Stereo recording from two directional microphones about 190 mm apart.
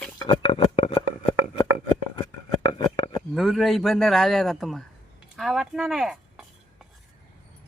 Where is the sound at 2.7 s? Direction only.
30° left (ahead or behind).